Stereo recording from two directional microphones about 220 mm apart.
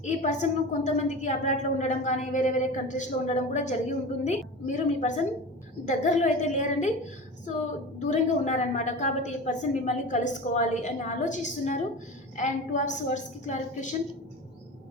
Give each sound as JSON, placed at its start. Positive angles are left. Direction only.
{"t": 0.0, "sound": "a woman's voice", "side_deg": 30}
{"t": 7.9, "sound": "a woman's voice", "side_deg": 30}